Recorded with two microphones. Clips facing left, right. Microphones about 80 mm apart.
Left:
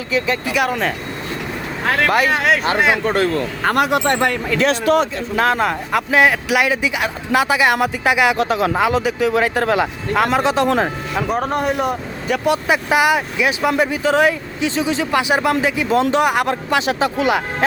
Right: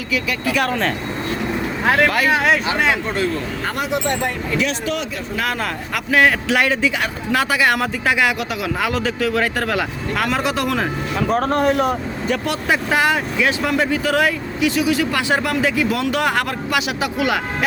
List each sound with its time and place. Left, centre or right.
0.1 s speech: left
0.5 s speech: centre
2.0 s speech: centre
2.3 s speech: centre
2.7 s speech: centre
3.1 s speech: left
4.7 s speech: left
5.5 s speech: left
8.4 s speech: left
8.9 s speech: left
11.2 s speech: centre
12.5 s speech: centre